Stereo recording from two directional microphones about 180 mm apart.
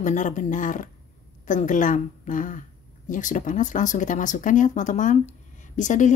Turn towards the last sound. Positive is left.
turn(degrees=45)  # may be behind; listen again after turning